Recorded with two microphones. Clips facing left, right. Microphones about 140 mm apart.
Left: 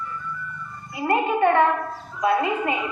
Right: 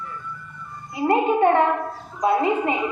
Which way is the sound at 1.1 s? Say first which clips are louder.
Right 2 dB; 30° right (ahead or behind).